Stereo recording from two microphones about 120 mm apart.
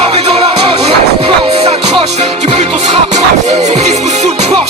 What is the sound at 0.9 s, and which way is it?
Music, 60° right (ahead or behind).